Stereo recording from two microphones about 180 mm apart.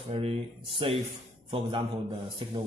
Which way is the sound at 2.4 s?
30° right (ahead or behind).